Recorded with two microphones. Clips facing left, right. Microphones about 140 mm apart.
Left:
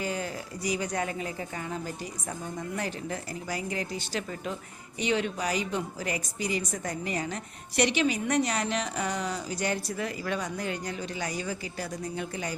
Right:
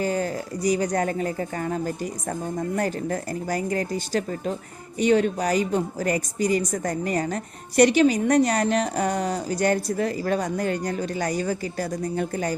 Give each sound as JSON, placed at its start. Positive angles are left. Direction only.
{"t": 0.0, "sound": "a woman's voice", "side_deg": -45}